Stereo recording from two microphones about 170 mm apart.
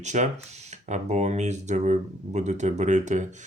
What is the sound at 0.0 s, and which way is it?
Speech, 45° right (ahead or behind).